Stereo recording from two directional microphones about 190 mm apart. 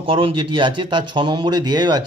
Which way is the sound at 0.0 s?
30° right (ahead or behind).